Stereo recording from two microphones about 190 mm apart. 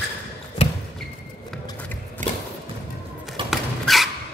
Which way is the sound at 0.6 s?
35° left (ahead or behind).